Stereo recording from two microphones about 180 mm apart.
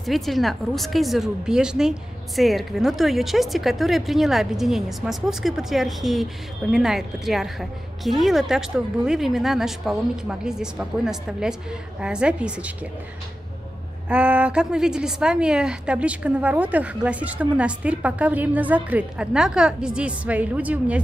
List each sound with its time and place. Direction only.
0.0 s a woman's voice: centre (ahead or behind)
14.0 s a woman's voice: 5° right (ahead or behind)